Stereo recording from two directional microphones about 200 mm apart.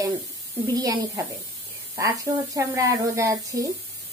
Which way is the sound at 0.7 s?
15° right (ahead or behind).